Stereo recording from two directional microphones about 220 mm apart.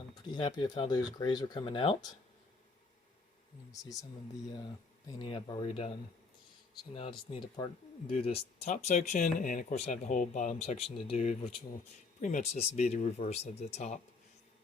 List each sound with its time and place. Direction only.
0.3 s speech: 20° left (ahead or behind)
3.7 s speech: 15° left (ahead or behind)
5.0 s speech: 20° left (ahead or behind)
6.9 s speech: 25° left (ahead or behind)